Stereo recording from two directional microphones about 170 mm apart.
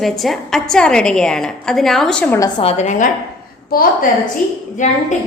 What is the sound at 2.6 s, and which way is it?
Speech, 40° left (ahead or behind).